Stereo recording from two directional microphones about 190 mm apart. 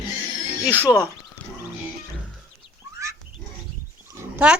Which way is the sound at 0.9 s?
20° left (ahead or behind).